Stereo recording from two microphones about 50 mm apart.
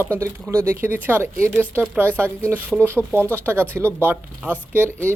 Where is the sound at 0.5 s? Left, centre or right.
Right.